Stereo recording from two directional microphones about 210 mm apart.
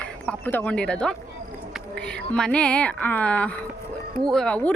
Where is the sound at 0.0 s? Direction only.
5° left (ahead or behind).